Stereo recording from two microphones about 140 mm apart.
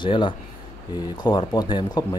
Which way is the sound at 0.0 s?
35° left (ahead or behind).